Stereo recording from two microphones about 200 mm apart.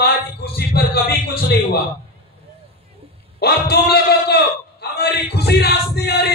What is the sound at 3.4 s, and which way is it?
A man's voice, 55° left (ahead or behind).